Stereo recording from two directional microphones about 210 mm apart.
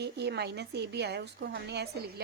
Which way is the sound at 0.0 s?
50° right (ahead or behind).